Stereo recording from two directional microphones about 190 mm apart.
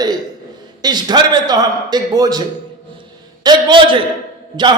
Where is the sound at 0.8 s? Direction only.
20° right (ahead or behind).